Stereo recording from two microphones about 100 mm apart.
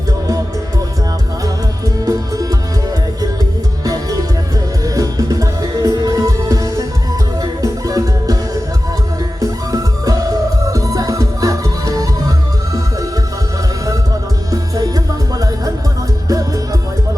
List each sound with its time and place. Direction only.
2.0 s music: 35° right (ahead or behind)
3.8 s music: 35° right (ahead or behind)
9.4 s music: 35° right (ahead or behind)
14.5 s music: 40° right (ahead or behind)